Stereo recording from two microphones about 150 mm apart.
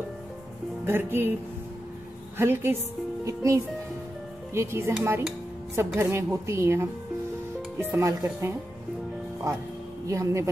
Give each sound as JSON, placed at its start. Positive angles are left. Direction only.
{"t": 0.8, "sound": "a woman's voice", "side_deg": -15}
{"t": 2.3, "sound": "a woman's voice", "side_deg": -15}
{"t": 10.0, "sound": "speech", "side_deg": -20}